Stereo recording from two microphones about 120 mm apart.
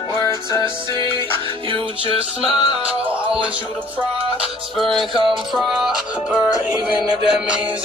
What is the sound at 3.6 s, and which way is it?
Music, 50° right (ahead or behind).